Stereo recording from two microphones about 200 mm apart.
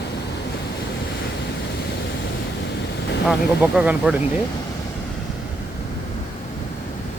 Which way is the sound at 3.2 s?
5° right (ahead or behind).